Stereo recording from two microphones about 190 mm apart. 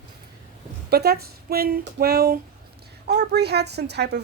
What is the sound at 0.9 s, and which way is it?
A woman's voice, 55° right (ahead or behind).